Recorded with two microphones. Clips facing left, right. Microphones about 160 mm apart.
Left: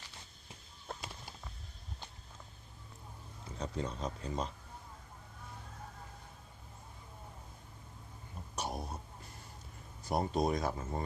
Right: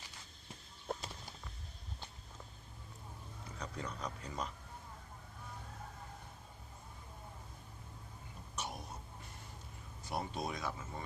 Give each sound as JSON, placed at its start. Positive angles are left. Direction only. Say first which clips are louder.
{"t": 3.6, "sound": "speech", "louder": "left 5 dB", "side_deg": 25}
{"t": 8.5, "sound": "throat clearing", "louder": "left 5 dB", "side_deg": 35}
{"t": 10.1, "sound": "speech", "louder": "left 8 dB", "side_deg": 40}